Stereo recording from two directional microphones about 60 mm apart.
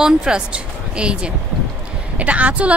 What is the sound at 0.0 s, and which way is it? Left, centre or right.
Speech, centre.